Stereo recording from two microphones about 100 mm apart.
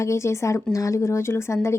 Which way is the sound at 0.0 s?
30° left (ahead or behind).